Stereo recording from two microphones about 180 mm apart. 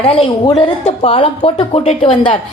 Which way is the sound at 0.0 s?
30° left (ahead or behind).